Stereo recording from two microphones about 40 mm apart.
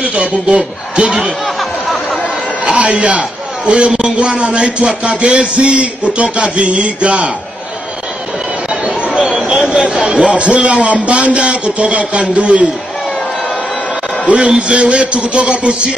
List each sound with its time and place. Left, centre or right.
0.0 s a man's voice: right
1.4 s chatter: centre
2.6 s a man's voice: right
9.8 s a man's voice: right
14.2 s a man's voice: right